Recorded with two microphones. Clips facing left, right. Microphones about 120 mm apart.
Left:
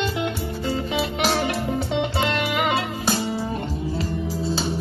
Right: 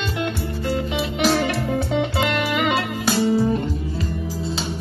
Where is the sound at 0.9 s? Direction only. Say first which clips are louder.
Right 3 dB; 30° left (ahead or behind).